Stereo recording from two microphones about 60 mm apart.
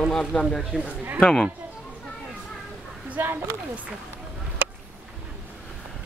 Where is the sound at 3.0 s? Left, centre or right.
Right.